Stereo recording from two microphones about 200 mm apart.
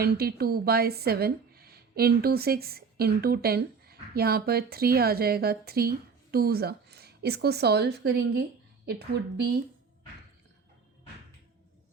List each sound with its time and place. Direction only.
0.0 s a woman's voice: 50° right (ahead or behind)